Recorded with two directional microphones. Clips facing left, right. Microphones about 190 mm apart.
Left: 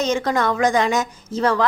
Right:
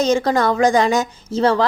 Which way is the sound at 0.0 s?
35° right (ahead or behind).